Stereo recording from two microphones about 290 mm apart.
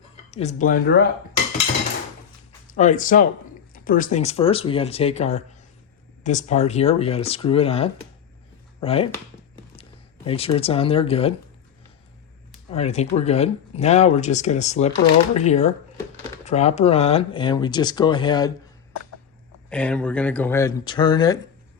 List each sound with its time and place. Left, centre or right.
0.3 s speech: left
2.6 s speech: left
10.2 s speech: centre
12.7 s speech: left
19.7 s speech: centre